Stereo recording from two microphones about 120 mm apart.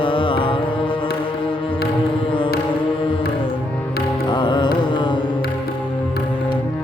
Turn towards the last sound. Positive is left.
turn(degrees=40)  # may be behind; listen again after turning